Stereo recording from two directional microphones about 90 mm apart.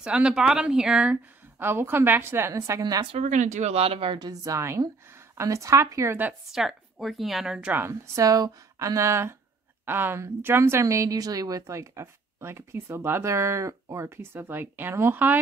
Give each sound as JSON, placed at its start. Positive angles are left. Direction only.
{"t": 0.0, "sound": "speech", "side_deg": -10}
{"t": 1.6, "sound": "a woman's voice", "side_deg": -25}
{"t": 3.7, "sound": "speech", "side_deg": -90}
{"t": 4.2, "sound": "speech", "side_deg": -40}
{"t": 6.5, "sound": "a woman's voice", "side_deg": 0}
{"t": 7.7, "sound": "a woman's voice", "side_deg": -25}
{"t": 8.2, "sound": "a woman's voice", "side_deg": -40}